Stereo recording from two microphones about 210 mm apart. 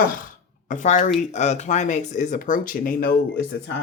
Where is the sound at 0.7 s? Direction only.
35° left (ahead or behind).